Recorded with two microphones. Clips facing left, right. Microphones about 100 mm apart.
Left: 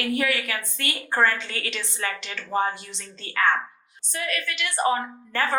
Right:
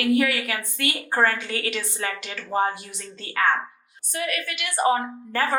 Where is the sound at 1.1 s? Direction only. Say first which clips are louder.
Even; 35° right (ahead or behind).